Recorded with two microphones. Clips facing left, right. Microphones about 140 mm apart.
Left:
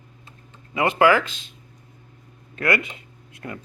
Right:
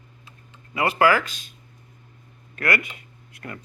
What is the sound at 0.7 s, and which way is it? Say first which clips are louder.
Speech: left 2 dB; 20° left (ahead or behind).